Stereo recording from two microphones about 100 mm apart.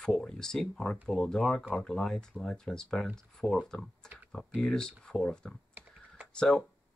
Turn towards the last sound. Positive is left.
turn(degrees=10)  # may be behind; listen again after turning